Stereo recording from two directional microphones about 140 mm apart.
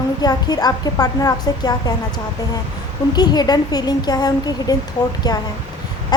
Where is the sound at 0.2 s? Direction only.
30° left (ahead or behind).